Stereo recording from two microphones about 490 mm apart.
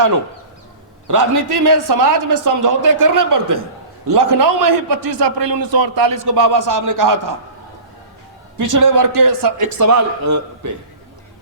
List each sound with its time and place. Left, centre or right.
1.0 s a man's voice: right
8.5 s a man's voice: right